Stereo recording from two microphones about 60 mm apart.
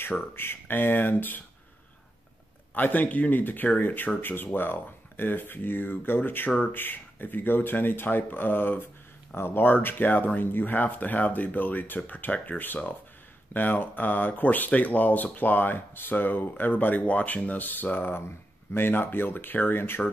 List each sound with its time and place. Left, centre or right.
0.0 s speech: left
2.7 s speech: left